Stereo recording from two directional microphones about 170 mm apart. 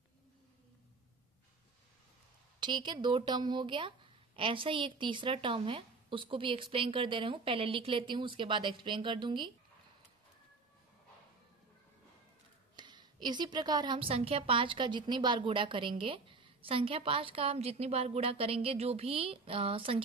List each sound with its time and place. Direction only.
2.6 s speech: 25° right (ahead or behind)
12.7 s a woman's voice: 25° right (ahead or behind)